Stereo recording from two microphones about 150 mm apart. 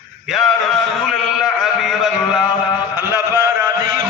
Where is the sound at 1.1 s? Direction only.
Centre (ahead or behind).